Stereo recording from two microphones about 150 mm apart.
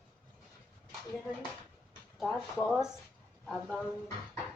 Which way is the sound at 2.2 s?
Centre (ahead or behind).